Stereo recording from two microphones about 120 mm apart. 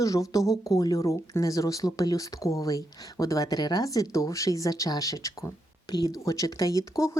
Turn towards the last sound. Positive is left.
turn(degrees=30)  # may be behind; listen again after turning